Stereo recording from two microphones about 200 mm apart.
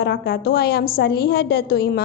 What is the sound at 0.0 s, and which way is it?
A woman's voice, 50° left (ahead or behind).